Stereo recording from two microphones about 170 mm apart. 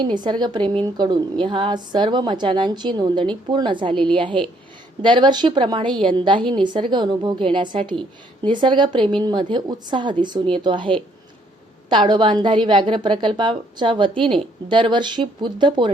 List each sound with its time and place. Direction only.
0.0 s a woman's voice: 25° right (ahead or behind)